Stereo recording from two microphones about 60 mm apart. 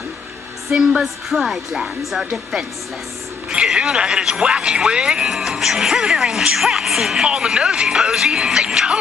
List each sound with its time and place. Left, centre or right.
0.7 s music: centre
1.0 s a woman's voice: centre